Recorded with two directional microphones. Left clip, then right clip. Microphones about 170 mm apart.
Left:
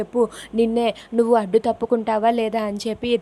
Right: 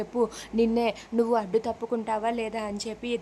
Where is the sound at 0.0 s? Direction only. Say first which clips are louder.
Left 6 dB; 20° left (ahead or behind).